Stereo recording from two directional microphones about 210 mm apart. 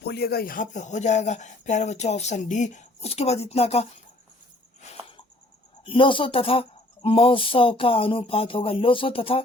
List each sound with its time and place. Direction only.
0.0 s speech: 50° left (ahead or behind); by 3.8 s 30° left (ahead or behind)
4.8 s a sound: 30° left (ahead or behind)
5.8 s speech: 25° left (ahead or behind)